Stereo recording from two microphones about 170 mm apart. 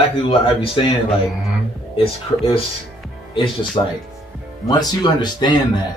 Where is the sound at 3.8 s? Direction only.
25° left (ahead or behind).